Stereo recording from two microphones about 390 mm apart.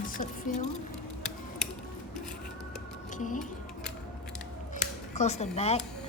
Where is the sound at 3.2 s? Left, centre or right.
Centre.